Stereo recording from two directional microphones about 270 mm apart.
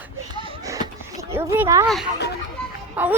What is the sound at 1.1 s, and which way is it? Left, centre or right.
Speech, centre.